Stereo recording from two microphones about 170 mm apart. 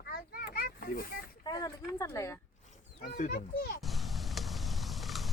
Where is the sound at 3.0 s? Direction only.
50° left (ahead or behind).